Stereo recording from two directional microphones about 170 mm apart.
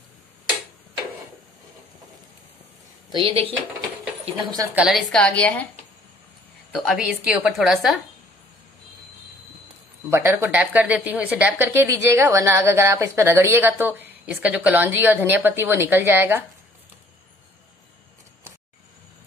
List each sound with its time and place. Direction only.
3.1 s a woman's voice: 30° right (ahead or behind)
4.7 s a woman's voice: centre (ahead or behind)
6.7 s a woman's voice: centre (ahead or behind)
10.0 s speech: 15° right (ahead or behind)